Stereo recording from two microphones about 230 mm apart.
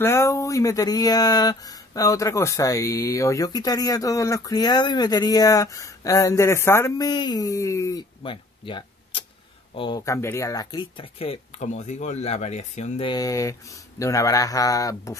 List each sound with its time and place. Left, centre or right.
0.0 s speech: centre